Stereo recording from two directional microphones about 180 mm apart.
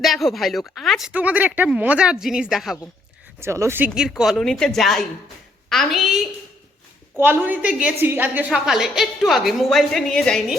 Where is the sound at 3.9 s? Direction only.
Centre (ahead or behind).